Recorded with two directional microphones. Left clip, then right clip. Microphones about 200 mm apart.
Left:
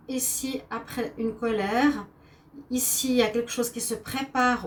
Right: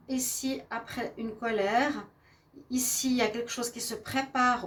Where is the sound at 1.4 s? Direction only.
40° right (ahead or behind).